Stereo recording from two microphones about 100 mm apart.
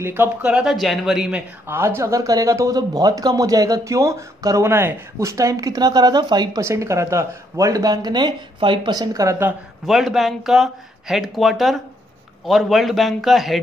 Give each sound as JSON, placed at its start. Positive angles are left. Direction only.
{"t": 0.0, "sound": "speech", "side_deg": -25}
{"t": 0.4, "sound": "speech", "side_deg": -5}
{"t": 1.7, "sound": "speech", "side_deg": -25}
{"t": 6.6, "sound": "speech", "side_deg": -30}
{"t": 9.8, "sound": "speech", "side_deg": 0}